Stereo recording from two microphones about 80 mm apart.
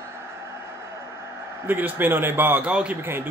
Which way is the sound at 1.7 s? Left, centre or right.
Right.